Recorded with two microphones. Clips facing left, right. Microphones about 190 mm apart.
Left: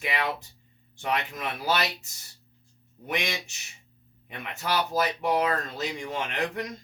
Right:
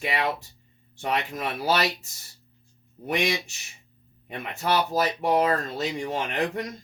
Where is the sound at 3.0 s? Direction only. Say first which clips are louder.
Right 5 dB; 35° right (ahead or behind).